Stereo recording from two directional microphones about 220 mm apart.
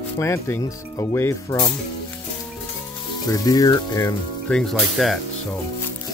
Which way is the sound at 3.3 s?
15° left (ahead or behind).